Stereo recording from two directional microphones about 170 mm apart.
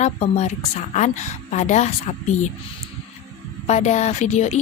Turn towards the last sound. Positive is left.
turn(degrees=40)  # may be behind; listen again after turning